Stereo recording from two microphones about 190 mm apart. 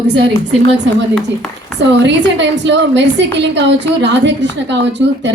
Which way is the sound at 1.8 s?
70° right (ahead or behind).